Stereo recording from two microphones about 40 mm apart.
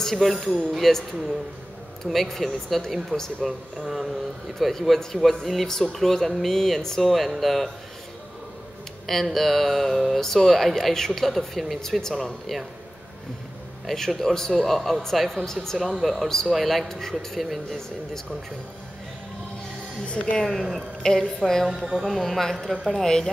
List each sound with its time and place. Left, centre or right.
0.0 s speech: centre
2.0 s speech: centre
3.1 s speech: left
3.4 s speech: centre
9.0 s speech: centre
13.8 s speech: centre
15.4 s speech: centre
20.1 s speech: left
21.0 s a woman's voice: centre
23.0 s speech: centre